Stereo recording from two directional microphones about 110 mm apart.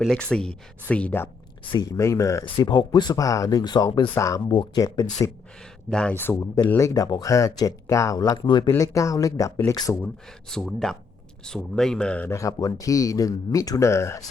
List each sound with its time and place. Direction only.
0.1 s speech: 5° left (ahead or behind)
1.7 s speech: 35° left (ahead or behind)
2.4 s speech: 45° left (ahead or behind)
4.1 s speech: 30° left (ahead or behind)
4.4 s speech: 40° left (ahead or behind)
5.9 s speech: 10° left (ahead or behind)
6.1 s speech: 20° left (ahead or behind)
6.7 s speech: 30° left (ahead or behind)
8.8 s speech: 30° left (ahead or behind)
10.5 s speech: 5° left (ahead or behind)
12.3 s speech: 30° left (ahead or behind)